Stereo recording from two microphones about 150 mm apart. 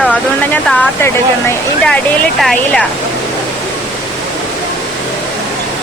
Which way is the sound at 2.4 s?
5° left (ahead or behind).